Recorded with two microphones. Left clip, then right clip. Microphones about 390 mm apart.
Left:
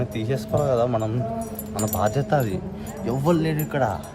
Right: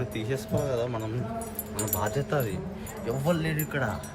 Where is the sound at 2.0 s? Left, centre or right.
Centre.